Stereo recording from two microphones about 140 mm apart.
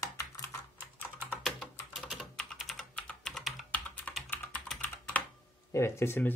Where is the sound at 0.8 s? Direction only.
15° right (ahead or behind).